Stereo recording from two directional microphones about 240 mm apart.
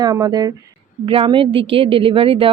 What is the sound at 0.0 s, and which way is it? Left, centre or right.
A woman's voice, centre.